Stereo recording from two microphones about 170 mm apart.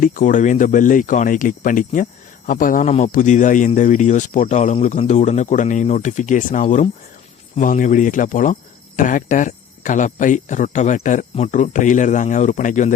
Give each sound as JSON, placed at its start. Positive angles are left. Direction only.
{"t": 0.0, "sound": "speech", "side_deg": 50}